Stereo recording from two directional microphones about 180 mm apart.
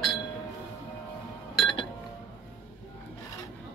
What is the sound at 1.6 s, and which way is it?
Alarm clock, 25° left (ahead or behind).